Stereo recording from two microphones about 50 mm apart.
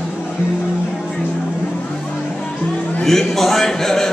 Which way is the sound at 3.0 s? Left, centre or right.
Centre.